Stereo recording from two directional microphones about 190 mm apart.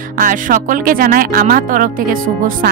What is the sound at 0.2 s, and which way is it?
Speech, 45° right (ahead or behind).